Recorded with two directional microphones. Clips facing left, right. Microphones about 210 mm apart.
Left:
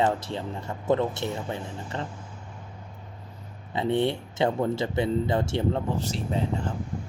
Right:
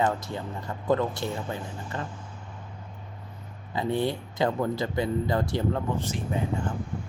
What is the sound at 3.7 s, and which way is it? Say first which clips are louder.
Speech: left 2 dB; 25° left (ahead or behind).